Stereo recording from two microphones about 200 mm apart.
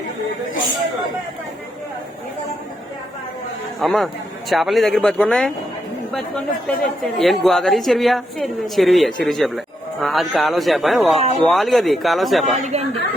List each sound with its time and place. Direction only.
3.8 s a woman's voice: centre (ahead or behind)
12.6 s speech: 30° right (ahead or behind)